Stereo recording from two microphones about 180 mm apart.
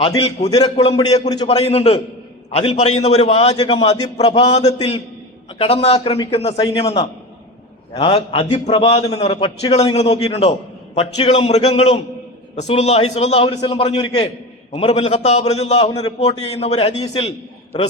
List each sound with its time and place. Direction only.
0.5 s speech: 20° left (ahead or behind)
0.9 s a man's voice: 35° left (ahead or behind)
3.5 s speech: 25° left (ahead or behind)
4.2 s a man's voice: 35° left (ahead or behind)